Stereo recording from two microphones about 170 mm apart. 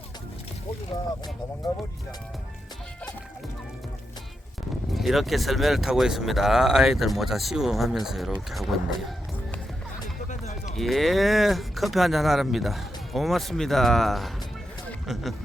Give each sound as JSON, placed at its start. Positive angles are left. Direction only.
{"t": 4.9, "sound": "speech", "side_deg": 0}
{"t": 10.2, "sound": "music", "side_deg": 45}
{"t": 10.8, "sound": "speech", "side_deg": 0}